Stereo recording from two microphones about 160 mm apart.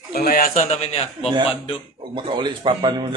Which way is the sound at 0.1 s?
70° left (ahead or behind).